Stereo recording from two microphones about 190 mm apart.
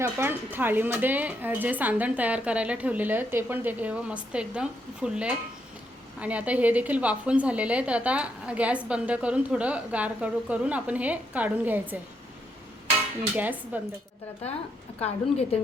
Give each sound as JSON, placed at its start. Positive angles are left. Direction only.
{"t": 0.0, "sound": "a woman's voice", "side_deg": -10}
{"t": 13.3, "sound": "a woman's voice", "side_deg": -10}
{"t": 14.9, "sound": "a woman's voice", "side_deg": 35}